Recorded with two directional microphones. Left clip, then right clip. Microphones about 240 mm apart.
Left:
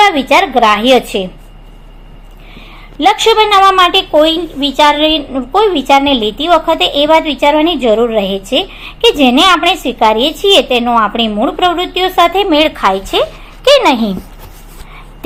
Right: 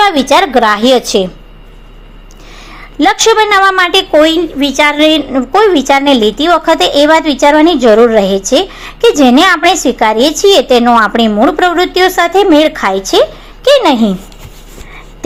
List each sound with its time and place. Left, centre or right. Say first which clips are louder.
0.0 s a woman's voice: right 1 dB; right
3.0 s a woman's voice: right 1 dB; right
13.7 s a woman's voice: right 1 dB; right